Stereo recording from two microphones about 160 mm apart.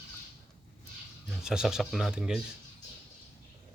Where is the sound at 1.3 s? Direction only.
5° right (ahead or behind).